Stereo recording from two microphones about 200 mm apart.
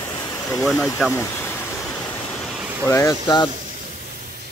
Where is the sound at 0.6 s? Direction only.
Centre (ahead or behind).